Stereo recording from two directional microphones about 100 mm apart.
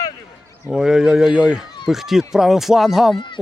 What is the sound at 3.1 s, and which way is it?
Speech, 50° left (ahead or behind).